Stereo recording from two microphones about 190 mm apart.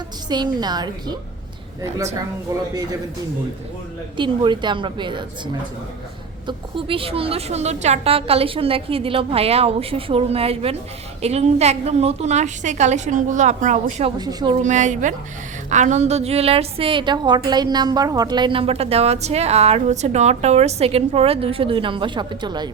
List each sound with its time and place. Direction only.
0.3 s a woman's voice: 20° right (ahead or behind)
2.5 s a woman's voice: 20° right (ahead or behind)
4.2 s a woman's voice: 25° right (ahead or behind)
6.5 s a woman's voice: 25° right (ahead or behind)
14.2 s a woman's voice: 20° right (ahead or behind)
14.5 s a woman's voice: 40° right (ahead or behind); by 22.7 s 20° right (ahead or behind)